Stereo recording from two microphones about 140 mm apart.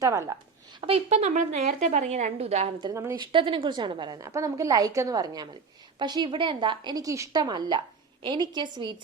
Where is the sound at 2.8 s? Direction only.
20° right (ahead or behind).